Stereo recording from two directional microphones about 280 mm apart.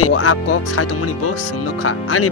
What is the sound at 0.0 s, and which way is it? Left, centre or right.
Speech, left.